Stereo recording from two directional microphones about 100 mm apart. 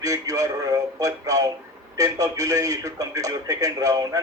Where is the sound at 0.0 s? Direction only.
35° right (ahead or behind).